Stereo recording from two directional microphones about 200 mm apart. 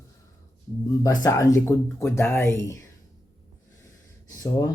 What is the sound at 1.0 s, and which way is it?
Speech, 15° left (ahead or behind).